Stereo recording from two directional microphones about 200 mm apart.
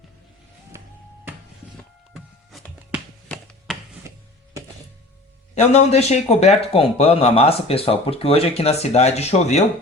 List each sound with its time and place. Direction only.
2.1 s music: centre (ahead or behind)
3.2 s a sound: centre (ahead or behind)
4.1 s music: 15° right (ahead or behind)
5.5 s a man's voice: 30° left (ahead or behind)